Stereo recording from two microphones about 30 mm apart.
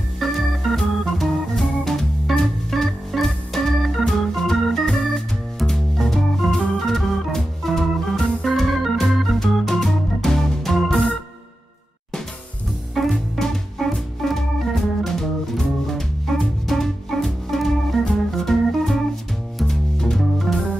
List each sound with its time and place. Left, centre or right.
0.2 s organ: centre
3.1 s organ: centre
10.5 s music: centre
13.1 s music: centre
14.2 s organ: centre
19.6 s music: centre